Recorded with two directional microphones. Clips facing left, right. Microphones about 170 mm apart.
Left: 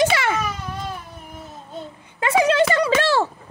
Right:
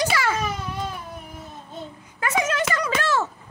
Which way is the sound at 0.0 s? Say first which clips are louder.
Left 4 dB; 25° left (ahead or behind).